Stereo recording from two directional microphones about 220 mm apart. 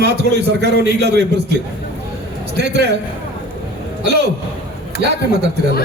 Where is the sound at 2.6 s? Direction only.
50° right (ahead or behind).